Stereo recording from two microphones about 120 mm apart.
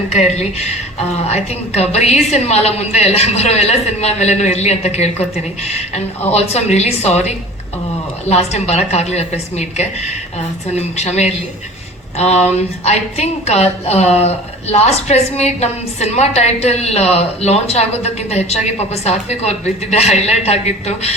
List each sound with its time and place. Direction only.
0.1 s a woman's voice: 65° left (ahead or behind)